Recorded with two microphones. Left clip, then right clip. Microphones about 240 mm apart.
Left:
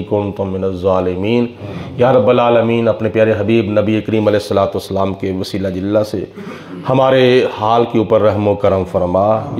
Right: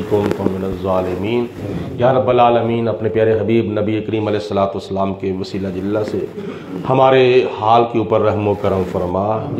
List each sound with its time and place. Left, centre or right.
0.8 s a man's voice: left
6.9 s a man's voice: left